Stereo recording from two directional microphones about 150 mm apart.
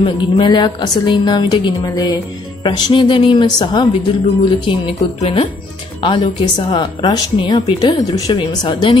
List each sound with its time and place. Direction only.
0.0 s a woman's voice: 30° left (ahead or behind)